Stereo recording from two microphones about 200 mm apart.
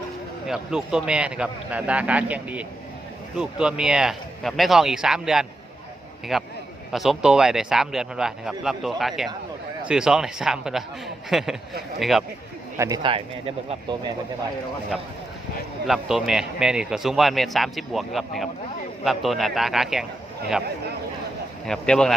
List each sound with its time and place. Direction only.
0.4 s speech: 5° right (ahead or behind)
12.7 s speech: 15° right (ahead or behind)
15.9 s speech: centre (ahead or behind)
21.7 s speech: 5° left (ahead or behind)